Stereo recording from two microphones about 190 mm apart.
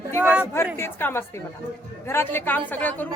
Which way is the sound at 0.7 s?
10° left (ahead or behind).